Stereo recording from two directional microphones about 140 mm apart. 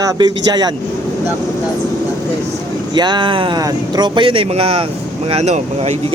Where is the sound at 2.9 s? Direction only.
30° right (ahead or behind); by 6.1 s 50° right (ahead or behind).